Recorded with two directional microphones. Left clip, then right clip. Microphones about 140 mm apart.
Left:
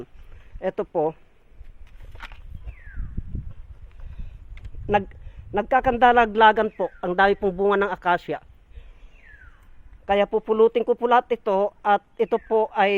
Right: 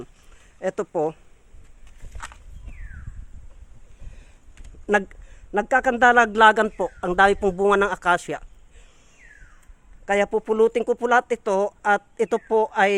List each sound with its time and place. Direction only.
0.6 s speech: 5° right (ahead or behind)
2.1 s walk: 75° left (ahead or behind)
4.9 s a sound: 20° right (ahead or behind)
5.6 s speech: 5° right (ahead or behind)
10.1 s speech: 5° right (ahead or behind)